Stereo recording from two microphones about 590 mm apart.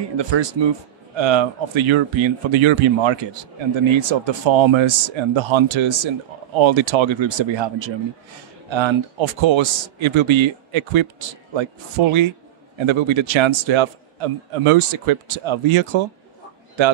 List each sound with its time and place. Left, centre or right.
0.2 s speech: right